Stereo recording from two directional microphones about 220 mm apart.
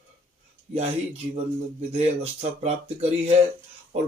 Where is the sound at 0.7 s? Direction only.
30° right (ahead or behind).